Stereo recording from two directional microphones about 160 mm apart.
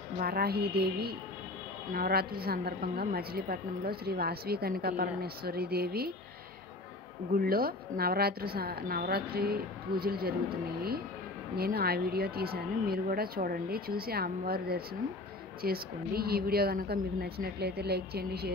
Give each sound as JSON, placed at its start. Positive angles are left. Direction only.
{"t": 0.2, "sound": "a woman's voice", "side_deg": -70}
{"t": 1.9, "sound": "a woman's voice", "side_deg": -70}
{"t": 7.3, "sound": "a woman's voice", "side_deg": -65}
{"t": 11.5, "sound": "a woman's voice", "side_deg": -75}